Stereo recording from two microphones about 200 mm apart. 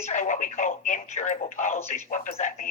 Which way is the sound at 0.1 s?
40° left (ahead or behind).